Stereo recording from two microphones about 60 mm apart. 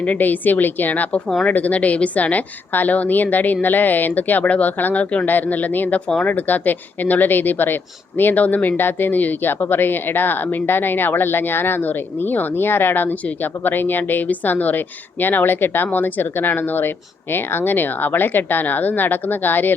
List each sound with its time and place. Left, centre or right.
0.0 s a woman's voice: left